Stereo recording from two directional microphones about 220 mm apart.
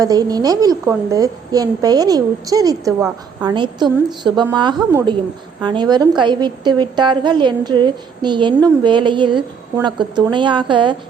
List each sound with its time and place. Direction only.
0.0 s a woman's voice: 15° right (ahead or behind)